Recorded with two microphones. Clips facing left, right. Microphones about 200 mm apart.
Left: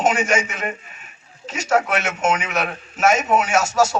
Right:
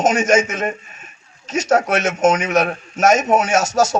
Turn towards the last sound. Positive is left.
turn(degrees=-40)  # may be behind; listen again after turning